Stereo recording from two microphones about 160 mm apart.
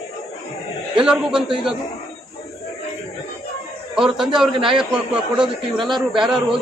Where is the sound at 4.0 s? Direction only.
Centre (ahead or behind).